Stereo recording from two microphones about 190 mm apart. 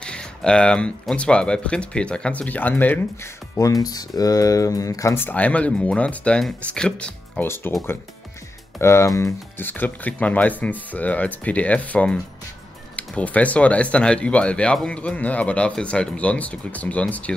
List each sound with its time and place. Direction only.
0.0 s speech: 5° left (ahead or behind)
8.7 s speech: 15° left (ahead or behind)